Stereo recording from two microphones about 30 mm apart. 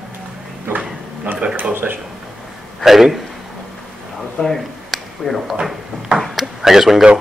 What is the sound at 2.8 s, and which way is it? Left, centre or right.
Speech, centre.